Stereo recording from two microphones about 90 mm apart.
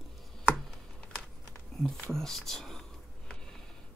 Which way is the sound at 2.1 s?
5° left (ahead or behind).